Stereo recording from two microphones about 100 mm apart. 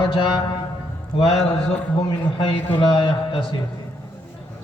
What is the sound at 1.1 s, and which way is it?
Speech, 65° left (ahead or behind).